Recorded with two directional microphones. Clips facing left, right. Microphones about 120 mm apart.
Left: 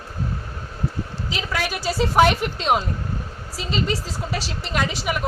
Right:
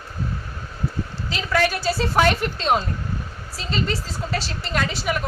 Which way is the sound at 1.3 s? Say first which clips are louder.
Right 5 dB; 15° left (ahead or behind).